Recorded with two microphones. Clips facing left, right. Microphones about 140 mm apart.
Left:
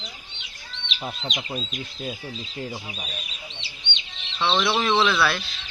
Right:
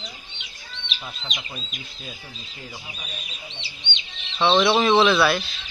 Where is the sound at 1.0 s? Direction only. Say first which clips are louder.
Left 7 dB; 35° left (ahead or behind).